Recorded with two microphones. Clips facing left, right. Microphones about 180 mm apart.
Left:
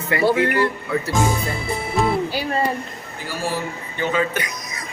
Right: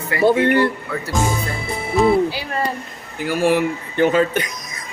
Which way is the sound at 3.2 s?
65° right (ahead or behind).